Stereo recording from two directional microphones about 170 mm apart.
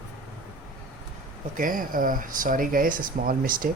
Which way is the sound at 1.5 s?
55° right (ahead or behind).